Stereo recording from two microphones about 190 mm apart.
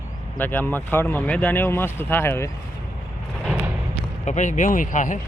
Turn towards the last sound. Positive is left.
turn(degrees=40)  # may be behind; listen again after turning